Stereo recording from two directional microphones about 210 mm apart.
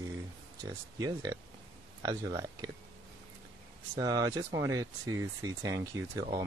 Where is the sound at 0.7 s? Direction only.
15° right (ahead or behind).